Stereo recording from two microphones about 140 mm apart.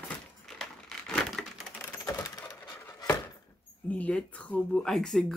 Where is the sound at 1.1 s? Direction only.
5° left (ahead or behind).